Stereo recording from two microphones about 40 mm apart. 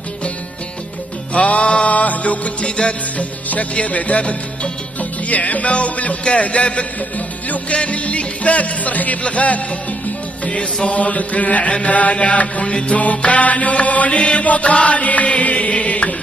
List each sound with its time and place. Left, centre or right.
1.3 s music: left